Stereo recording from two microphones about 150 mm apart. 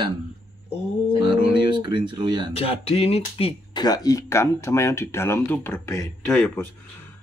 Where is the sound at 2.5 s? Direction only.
40° left (ahead or behind); by 6.1 s 20° left (ahead or behind).